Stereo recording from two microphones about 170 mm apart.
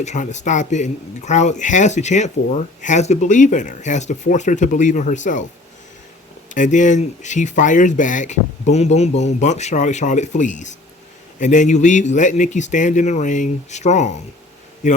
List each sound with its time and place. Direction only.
0.0 s speech: 45° left (ahead or behind)
6.5 s a man's voice: 50° left (ahead or behind)